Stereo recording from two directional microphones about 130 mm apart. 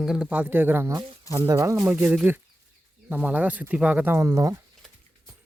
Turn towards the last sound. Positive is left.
turn(degrees=-25)  # may be behind; listen again after turning